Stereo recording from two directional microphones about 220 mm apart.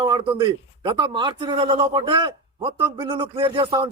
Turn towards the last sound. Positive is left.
turn(degrees=-20)  # may be behind; listen again after turning